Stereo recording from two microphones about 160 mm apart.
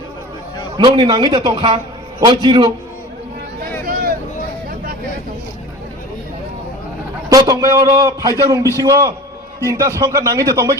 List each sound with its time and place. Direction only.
0.8 s a man's voice: 30° right (ahead or behind)
3.6 s a sound: 65° right (ahead or behind)
7.3 s a man's voice: 20° right (ahead or behind)